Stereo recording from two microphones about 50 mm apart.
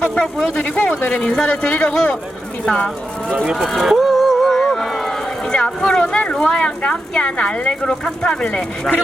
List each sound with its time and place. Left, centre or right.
0.0 s speech: left
0.6 s speech: left
1.1 s speech: centre
3.4 s speech: centre
3.8 s a sound: centre
5.5 s speech: centre
7.7 s speech: centre